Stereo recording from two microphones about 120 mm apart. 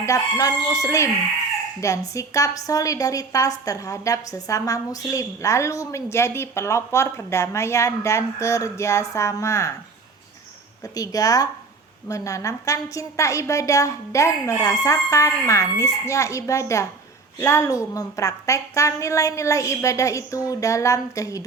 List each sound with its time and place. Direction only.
0.0 s a woman's voice: 25° left (ahead or behind)
10.8 s a woman's voice: 30° left (ahead or behind)